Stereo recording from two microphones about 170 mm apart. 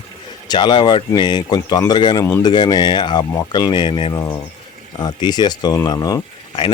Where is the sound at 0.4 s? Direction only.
25° left (ahead or behind).